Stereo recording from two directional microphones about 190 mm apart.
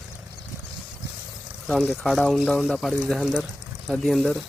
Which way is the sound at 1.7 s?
5° left (ahead or behind).